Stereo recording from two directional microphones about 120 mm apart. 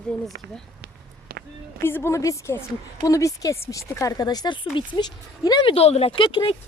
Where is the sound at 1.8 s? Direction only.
20° left (ahead or behind).